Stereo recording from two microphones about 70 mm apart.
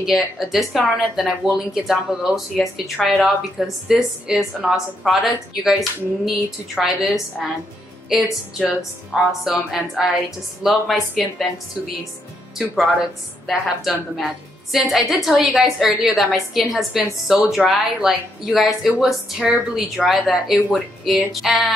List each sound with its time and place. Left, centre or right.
0.0 s a woman's voice: centre
12.5 s a woman's voice: centre